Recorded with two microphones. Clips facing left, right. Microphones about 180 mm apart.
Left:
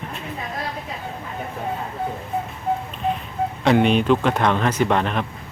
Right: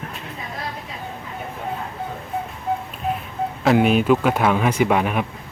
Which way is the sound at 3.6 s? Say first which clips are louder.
Right 1 dB; 5° right (ahead or behind).